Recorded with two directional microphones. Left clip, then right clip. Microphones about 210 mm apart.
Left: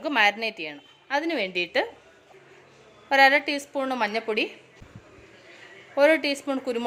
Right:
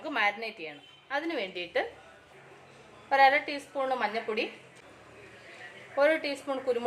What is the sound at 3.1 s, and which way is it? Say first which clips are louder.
A woman's voice: left 4 dB; 50° left (ahead or behind).